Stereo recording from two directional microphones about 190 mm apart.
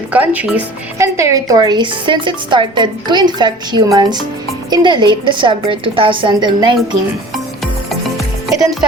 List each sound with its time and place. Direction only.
0.1 s speech: 10° right (ahead or behind); by 6.7 s 25° right (ahead or behind)